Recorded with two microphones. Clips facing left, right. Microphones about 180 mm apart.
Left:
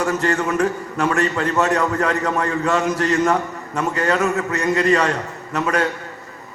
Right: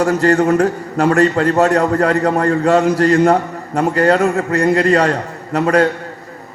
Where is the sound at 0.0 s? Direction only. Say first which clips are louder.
Right 7 dB; 35° right (ahead or behind).